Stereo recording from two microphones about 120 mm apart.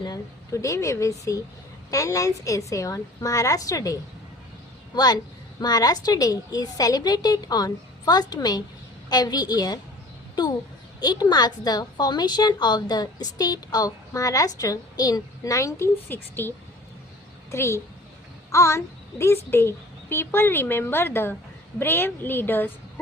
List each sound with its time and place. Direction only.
0.0 s speech: 30° left (ahead or behind)
4.9 s a woman's voice: 35° left (ahead or behind); by 22.7 s 15° left (ahead or behind)